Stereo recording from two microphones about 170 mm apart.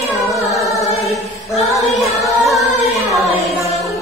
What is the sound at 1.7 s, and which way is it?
Music, centre (ahead or behind).